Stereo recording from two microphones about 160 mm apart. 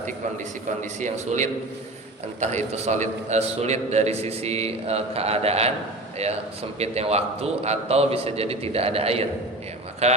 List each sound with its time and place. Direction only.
0.8 s a man's voice: 50° right (ahead or behind)